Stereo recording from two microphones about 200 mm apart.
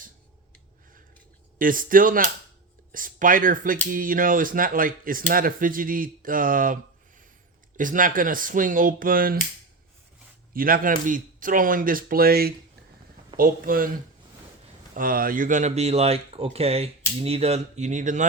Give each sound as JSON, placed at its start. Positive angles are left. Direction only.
{"t": 1.5, "sound": "speech", "side_deg": -45}
{"t": 7.8, "sound": "speech", "side_deg": -40}
{"t": 10.5, "sound": "speech", "side_deg": -45}
{"t": 14.9, "sound": "speech", "side_deg": -45}